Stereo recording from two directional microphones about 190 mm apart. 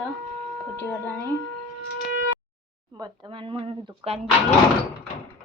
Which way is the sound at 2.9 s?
20° right (ahead or behind).